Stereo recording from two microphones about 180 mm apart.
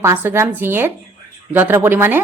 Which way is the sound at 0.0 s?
10° right (ahead or behind).